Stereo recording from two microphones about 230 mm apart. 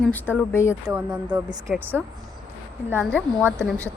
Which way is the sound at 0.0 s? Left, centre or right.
Centre.